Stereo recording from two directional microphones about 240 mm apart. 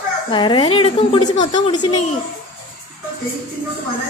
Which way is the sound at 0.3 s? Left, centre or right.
Centre.